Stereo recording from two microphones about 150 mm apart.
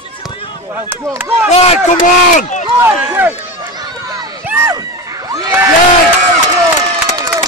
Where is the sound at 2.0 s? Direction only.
55° left (ahead or behind).